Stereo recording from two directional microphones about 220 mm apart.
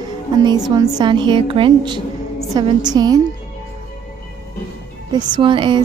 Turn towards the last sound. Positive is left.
turn(degrees=-20)  # may be behind; listen again after turning